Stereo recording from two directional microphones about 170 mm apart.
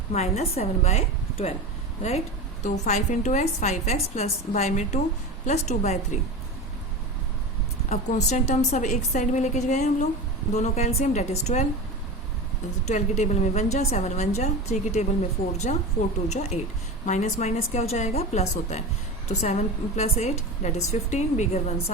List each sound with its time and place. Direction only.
0.1 s a woman's voice: 40° left (ahead or behind)
7.9 s a woman's voice: 40° left (ahead or behind)
12.9 s a woman's voice: 45° left (ahead or behind)